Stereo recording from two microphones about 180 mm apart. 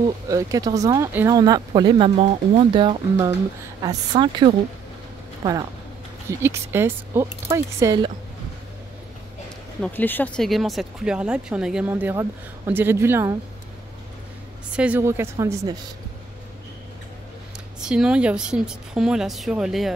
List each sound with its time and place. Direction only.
0.3 s speech: 20° right (ahead or behind)
9.8 s speech: 10° left (ahead or behind); by 13.4 s 15° right (ahead or behind)
14.7 s speech: 5° right (ahead or behind)
17.7 s speech: 5° right (ahead or behind)